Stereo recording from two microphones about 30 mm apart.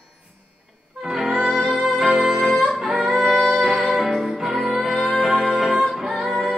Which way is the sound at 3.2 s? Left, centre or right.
Centre.